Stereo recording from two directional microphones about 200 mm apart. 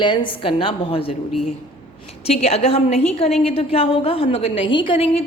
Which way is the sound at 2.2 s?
30° left (ahead or behind).